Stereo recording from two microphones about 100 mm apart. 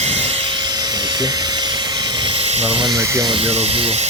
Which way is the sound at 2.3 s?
85° right.